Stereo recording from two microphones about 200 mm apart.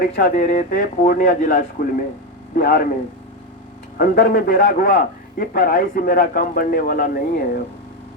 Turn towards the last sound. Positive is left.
turn(degrees=45)  # may be behind; listen again after turning